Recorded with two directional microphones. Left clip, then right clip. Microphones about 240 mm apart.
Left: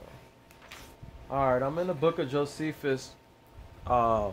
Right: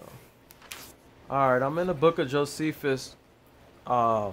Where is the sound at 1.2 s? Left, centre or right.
Right.